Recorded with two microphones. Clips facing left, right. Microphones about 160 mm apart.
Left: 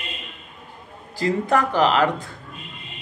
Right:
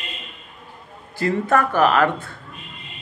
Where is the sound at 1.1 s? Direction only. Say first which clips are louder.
Right 1 dB; 15° left (ahead or behind).